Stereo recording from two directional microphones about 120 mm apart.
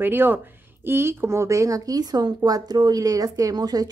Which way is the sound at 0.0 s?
15° right (ahead or behind).